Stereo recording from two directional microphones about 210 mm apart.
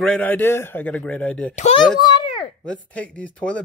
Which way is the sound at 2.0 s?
20° left (ahead or behind).